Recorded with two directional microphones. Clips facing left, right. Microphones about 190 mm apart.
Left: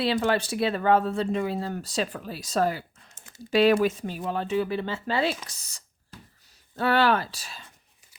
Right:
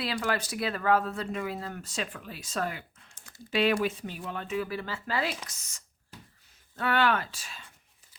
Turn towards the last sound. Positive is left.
turn(degrees=35)  # may be behind; listen again after turning